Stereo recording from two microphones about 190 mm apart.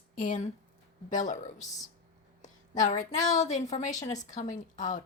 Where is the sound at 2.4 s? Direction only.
40° left (ahead or behind).